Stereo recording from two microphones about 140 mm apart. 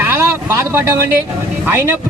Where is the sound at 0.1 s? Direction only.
20° right (ahead or behind).